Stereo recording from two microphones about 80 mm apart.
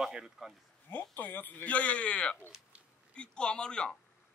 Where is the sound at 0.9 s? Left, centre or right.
Left.